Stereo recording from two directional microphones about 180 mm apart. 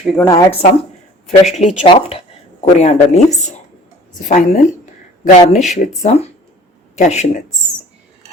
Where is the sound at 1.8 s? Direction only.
30° left (ahead or behind).